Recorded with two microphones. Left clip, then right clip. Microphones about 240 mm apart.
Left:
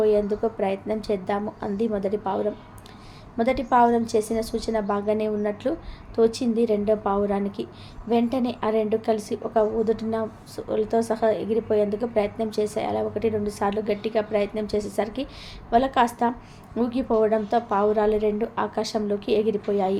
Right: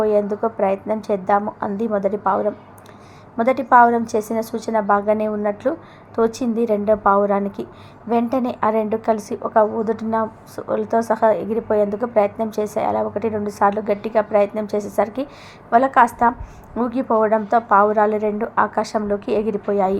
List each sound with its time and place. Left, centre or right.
0.0 s a woman's voice: centre